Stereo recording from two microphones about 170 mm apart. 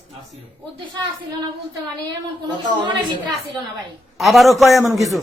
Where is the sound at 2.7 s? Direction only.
25° right (ahead or behind).